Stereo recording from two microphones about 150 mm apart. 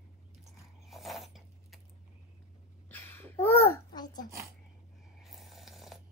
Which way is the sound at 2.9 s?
15° left (ahead or behind).